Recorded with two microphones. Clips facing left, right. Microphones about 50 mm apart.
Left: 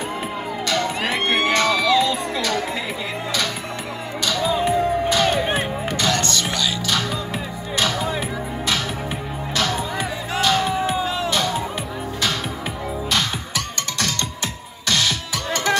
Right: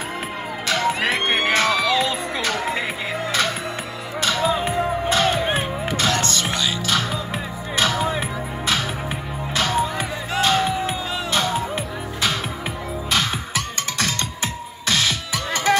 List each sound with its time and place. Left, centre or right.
0.7 s music: centre
1.0 s music: centre
1.5 s crowd: centre
2.0 s music: right
4.2 s music: right; by 5.7 s centre
5.9 s music: centre
9.6 s music: centre
13.1 s music: centre